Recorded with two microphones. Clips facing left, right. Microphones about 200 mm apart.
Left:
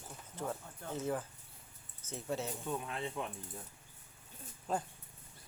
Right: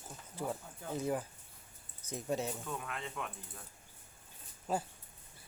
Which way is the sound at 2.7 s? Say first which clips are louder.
Left 3 dB; 30° left (ahead or behind).